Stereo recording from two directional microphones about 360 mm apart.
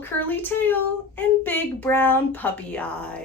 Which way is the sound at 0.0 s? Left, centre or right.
Centre.